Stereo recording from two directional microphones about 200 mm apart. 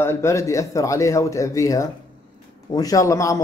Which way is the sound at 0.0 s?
15° left (ahead or behind).